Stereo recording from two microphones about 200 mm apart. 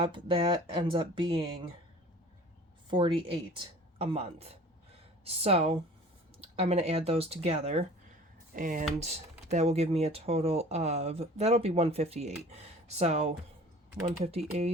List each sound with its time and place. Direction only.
0.0 s speech: 25° right (ahead or behind)
2.9 s speech: 25° right (ahead or behind)
8.5 s speech: 40° right (ahead or behind)